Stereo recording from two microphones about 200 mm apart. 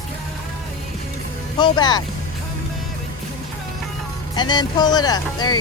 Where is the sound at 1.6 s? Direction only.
20° left (ahead or behind).